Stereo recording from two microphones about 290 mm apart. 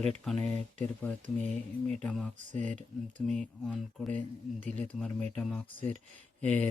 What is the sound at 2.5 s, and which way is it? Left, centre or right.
Speech, right.